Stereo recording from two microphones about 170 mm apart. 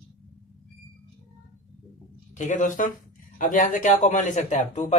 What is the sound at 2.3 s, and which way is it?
Speech, 45° left (ahead or behind).